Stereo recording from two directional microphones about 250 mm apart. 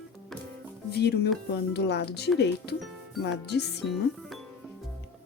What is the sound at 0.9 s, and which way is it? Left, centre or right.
Speech, left.